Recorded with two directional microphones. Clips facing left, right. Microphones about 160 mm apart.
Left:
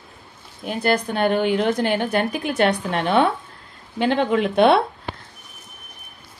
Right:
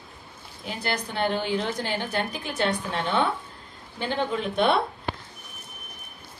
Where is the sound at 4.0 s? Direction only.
85° left.